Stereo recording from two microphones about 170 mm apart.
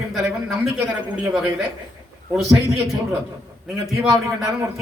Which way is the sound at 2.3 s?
Centre (ahead or behind).